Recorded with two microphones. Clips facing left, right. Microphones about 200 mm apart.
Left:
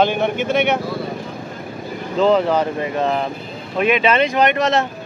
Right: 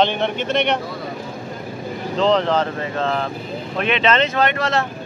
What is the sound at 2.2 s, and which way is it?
Speech, 10° left (ahead or behind).